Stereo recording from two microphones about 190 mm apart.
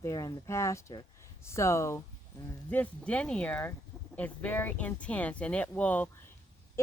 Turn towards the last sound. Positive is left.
turn(degrees=5)  # may be behind; listen again after turning